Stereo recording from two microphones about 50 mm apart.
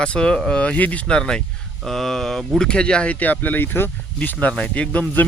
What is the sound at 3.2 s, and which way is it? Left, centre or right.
Speech, left.